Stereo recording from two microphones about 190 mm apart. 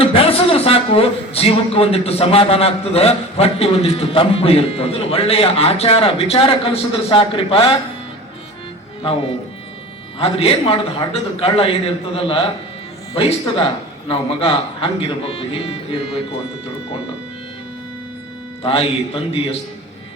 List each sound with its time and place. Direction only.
0.0 s a man's voice: 30° left (ahead or behind)
10.2 s a man's voice: 30° left (ahead or behind)
18.6 s a man's voice: 30° left (ahead or behind)